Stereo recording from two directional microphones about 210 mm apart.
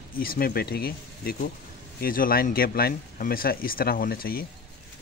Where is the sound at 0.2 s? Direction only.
45° left (ahead or behind).